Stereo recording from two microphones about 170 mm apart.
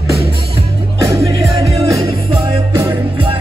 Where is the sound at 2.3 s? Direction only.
30° right (ahead or behind).